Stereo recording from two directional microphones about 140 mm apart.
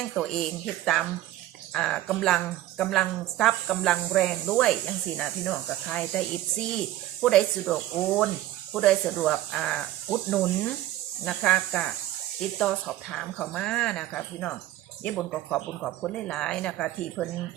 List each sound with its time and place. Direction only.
0.1 s a woman's voice: 5° left (ahead or behind)